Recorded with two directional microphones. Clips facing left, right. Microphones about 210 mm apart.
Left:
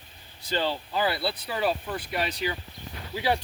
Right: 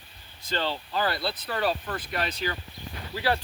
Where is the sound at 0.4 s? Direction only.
10° left (ahead or behind).